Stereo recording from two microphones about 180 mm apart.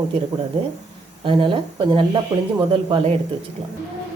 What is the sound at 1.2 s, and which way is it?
Speech, 30° right (ahead or behind).